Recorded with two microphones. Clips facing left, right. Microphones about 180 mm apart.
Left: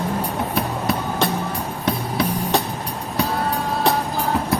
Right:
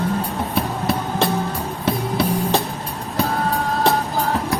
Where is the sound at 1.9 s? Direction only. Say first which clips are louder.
Right 2 dB; centre (ahead or behind).